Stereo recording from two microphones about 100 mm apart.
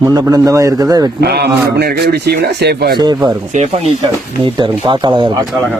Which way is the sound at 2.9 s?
45° right (ahead or behind).